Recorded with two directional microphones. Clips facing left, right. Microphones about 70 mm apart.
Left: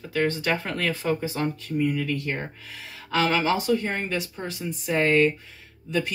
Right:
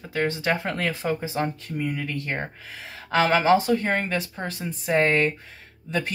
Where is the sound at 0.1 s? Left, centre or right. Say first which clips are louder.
Even; right.